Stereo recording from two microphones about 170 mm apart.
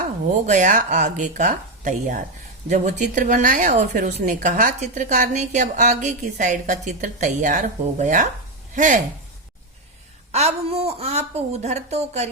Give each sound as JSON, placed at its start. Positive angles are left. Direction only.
{"t": 0.0, "sound": "a woman's voice", "side_deg": -45}
{"t": 10.3, "sound": "a woman's voice", "side_deg": -40}